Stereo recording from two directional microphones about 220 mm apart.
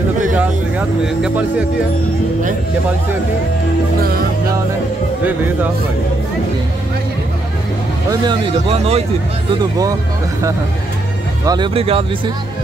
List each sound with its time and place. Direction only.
0.3 s speech: 5° right (ahead or behind)
5.2 s speech: 10° right (ahead or behind)
8.1 s speech: 20° right (ahead or behind)
11.4 s speech: 20° right (ahead or behind)